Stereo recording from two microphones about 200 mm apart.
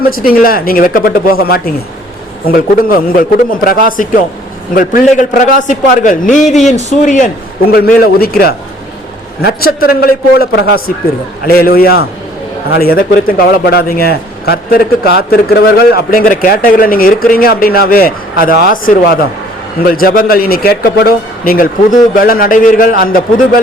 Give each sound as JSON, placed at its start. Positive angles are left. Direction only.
{"t": 0.0, "sound": "a man's voice", "side_deg": 45}
{"t": 8.0, "sound": "a man's voice", "side_deg": 50}